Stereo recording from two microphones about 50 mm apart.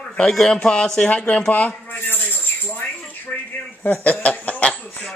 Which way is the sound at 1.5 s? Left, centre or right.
Left.